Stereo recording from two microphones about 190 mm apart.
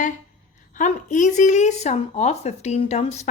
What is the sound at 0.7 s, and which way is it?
Speech, 40° left (ahead or behind).